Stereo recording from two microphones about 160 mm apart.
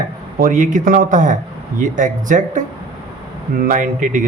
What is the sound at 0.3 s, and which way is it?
A man's voice, 55° right (ahead or behind).